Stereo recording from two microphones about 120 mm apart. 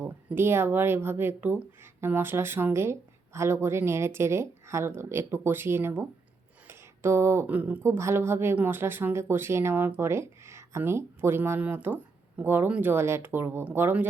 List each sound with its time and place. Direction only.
0.0 s speech: 20° right (ahead or behind)